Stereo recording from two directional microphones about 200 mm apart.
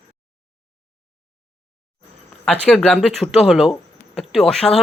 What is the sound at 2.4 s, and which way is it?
Speech, 5° left (ahead or behind).